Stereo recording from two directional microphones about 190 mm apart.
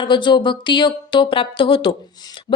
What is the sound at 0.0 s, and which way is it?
Speech, 25° left (ahead or behind).